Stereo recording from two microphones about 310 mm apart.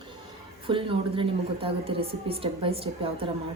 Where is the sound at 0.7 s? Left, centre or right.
Centre.